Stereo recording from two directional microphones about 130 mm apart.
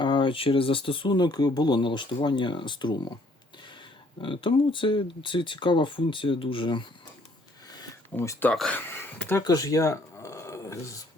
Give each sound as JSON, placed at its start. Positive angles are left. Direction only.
{"t": 0.0, "sound": "speech", "side_deg": 40}
{"t": 4.2, "sound": "speech", "side_deg": 40}
{"t": 8.1, "sound": "speech", "side_deg": 20}
{"t": 8.4, "sound": "speech", "side_deg": 10}
{"t": 8.8, "sound": "a sound", "side_deg": 15}
{"t": 9.4, "sound": "speech", "side_deg": 30}